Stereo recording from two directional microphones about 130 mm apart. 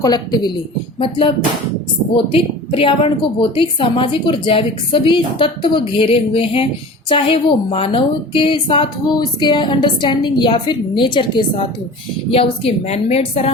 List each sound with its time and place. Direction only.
0.0 s a woman's voice: 35° left (ahead or behind); by 13.5 s 50° left (ahead or behind)